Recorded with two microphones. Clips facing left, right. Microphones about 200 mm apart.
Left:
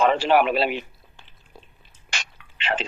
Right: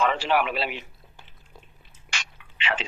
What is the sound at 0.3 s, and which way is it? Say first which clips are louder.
Speech: left 6 dB; 45° left (ahead or behind).